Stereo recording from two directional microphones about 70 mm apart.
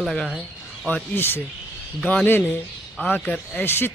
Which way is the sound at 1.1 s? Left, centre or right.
Left.